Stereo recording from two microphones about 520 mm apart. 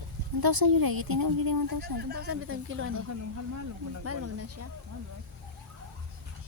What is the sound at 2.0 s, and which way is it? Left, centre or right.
Speech, centre.